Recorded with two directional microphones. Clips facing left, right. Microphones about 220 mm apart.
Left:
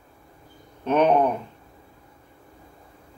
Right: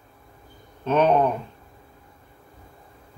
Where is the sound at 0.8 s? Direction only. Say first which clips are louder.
Even; 15° left (ahead or behind).